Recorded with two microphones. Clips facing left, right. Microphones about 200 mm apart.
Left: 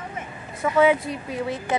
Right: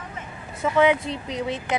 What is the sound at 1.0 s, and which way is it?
Speech, 25° right (ahead or behind).